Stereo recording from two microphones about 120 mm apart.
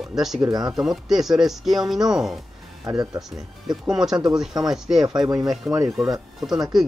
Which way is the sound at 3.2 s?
30° right (ahead or behind).